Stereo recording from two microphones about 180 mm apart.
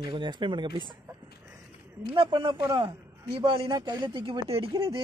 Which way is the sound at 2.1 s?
30° right (ahead or behind).